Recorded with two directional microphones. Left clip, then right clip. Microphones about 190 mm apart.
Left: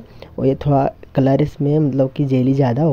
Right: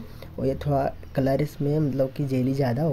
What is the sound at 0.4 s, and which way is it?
Speech, 35° left (ahead or behind).